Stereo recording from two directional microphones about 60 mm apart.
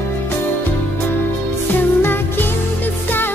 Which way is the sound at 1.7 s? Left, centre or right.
Left.